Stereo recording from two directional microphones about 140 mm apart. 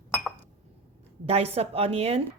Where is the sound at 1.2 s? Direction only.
45° right (ahead or behind).